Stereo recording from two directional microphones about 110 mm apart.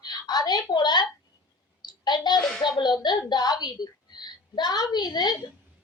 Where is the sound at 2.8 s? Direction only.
40° left (ahead or behind).